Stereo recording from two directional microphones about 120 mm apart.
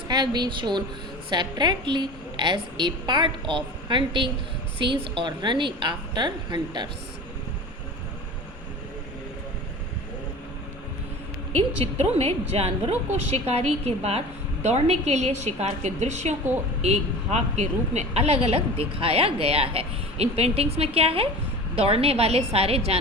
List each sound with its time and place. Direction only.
0.1 s a woman's voice: 35° right (ahead or behind)
11.5 s a woman's voice: 60° right (ahead or behind)